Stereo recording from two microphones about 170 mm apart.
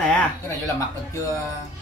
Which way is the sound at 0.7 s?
20° left (ahead or behind).